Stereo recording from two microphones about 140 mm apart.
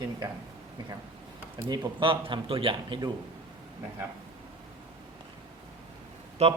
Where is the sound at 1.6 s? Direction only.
35° right (ahead or behind).